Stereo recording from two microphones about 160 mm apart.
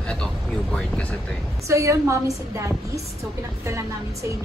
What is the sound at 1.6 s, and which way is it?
A woman's voice, 20° right (ahead or behind).